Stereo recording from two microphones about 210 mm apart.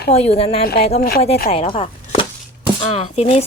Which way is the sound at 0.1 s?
30° left (ahead or behind).